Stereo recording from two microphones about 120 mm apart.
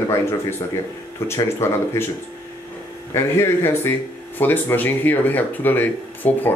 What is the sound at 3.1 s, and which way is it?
Speech, 20° left (ahead or behind).